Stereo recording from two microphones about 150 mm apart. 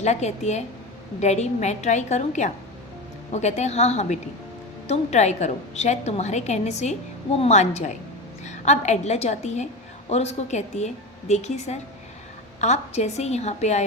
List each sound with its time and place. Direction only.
0.0 s a woman's voice: 50° left (ahead or behind)